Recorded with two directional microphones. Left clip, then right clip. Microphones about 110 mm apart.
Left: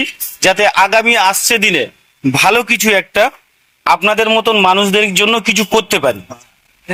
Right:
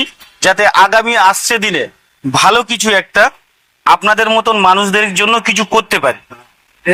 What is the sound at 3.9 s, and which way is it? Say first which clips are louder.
Speech: left 1 dB; 60° left (ahead or behind).